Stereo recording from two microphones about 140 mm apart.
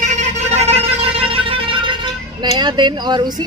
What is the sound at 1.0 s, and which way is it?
Music, 40° right (ahead or behind).